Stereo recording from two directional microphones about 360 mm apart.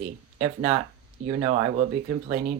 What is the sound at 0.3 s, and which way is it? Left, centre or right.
Speech, centre.